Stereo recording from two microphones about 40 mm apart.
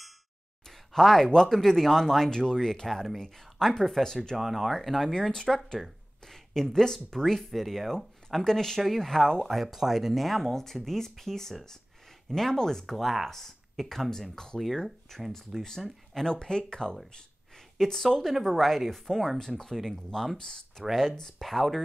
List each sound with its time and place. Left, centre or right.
0.7 s speech: centre
4.4 s speech: centre
5.1 s speech: centre
5.5 s speech: centre
8.5 s speech: centre
9.6 s speech: centre
10.2 s speech: centre
12.8 s speech: centre
15.8 s speech: centre
16.3 s speech: left
17.7 s speech: centre
21.4 s speech: centre